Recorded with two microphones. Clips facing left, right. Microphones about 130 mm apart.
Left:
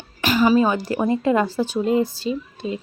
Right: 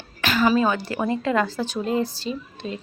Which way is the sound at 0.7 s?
35° left (ahead or behind).